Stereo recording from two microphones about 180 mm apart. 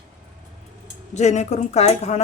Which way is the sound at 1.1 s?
40° left (ahead or behind).